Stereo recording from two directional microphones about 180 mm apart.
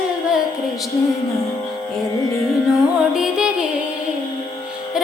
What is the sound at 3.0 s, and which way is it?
Music, 5° right (ahead or behind).